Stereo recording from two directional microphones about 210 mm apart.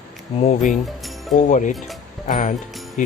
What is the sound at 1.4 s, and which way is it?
Speech, 35° left (ahead or behind).